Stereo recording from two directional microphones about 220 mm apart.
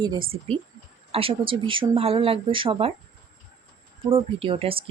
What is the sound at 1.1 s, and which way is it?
A woman's voice, 25° right (ahead or behind).